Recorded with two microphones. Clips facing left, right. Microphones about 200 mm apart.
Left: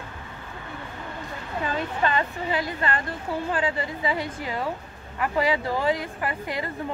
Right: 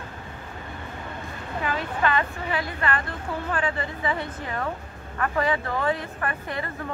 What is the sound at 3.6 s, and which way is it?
A woman's voice, 15° left (ahead or behind).